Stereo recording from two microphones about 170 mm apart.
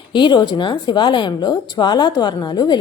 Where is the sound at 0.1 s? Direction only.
25° left (ahead or behind).